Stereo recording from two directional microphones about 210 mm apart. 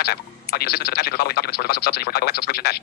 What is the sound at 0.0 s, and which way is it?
Speech, 50° left (ahead or behind).